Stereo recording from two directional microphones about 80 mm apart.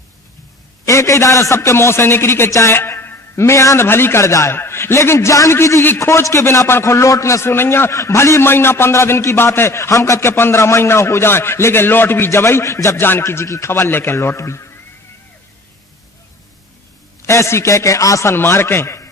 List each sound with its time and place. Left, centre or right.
0.9 s a man's voice: left
17.2 s a man's voice: left